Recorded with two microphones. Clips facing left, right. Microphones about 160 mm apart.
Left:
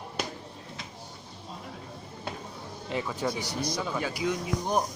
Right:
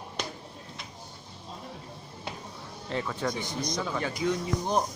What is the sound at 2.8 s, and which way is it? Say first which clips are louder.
A man's voice: even; 10° left (ahead or behind).